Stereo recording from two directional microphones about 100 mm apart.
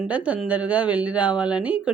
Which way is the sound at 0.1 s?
15° right (ahead or behind).